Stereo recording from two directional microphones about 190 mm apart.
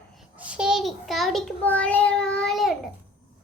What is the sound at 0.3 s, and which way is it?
Child singing, 5° right (ahead or behind).